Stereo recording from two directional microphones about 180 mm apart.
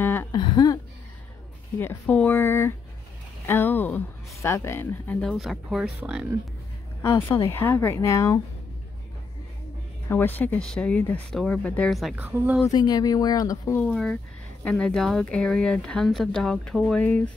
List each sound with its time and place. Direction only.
0.0 s a sound: 10° left (ahead or behind)
0.4 s a sound: 20° left (ahead or behind)
1.8 s speech: 10° left (ahead or behind)
7.0 s speech: 15° left (ahead or behind)
10.0 s speech: 10° left (ahead or behind); by 12.6 s 10° right (ahead or behind)
12.6 s speech: 20° left (ahead or behind); by 17.3 s 5° left (ahead or behind)